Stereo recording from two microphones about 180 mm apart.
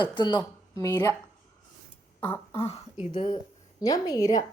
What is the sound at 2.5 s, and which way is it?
A woman's voice, 35° left (ahead or behind).